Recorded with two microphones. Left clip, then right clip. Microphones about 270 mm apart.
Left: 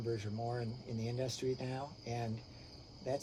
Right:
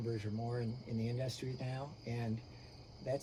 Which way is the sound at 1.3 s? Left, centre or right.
Centre.